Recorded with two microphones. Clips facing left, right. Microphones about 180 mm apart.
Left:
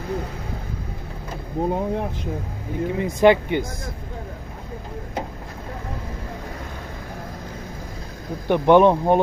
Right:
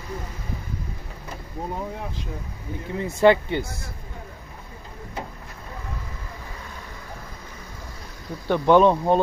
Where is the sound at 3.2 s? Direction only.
15° left (ahead or behind).